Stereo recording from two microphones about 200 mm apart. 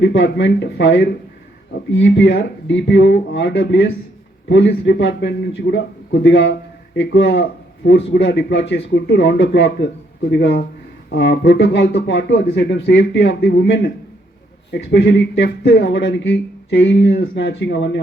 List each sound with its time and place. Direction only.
0.0 s speech: 65° left (ahead or behind)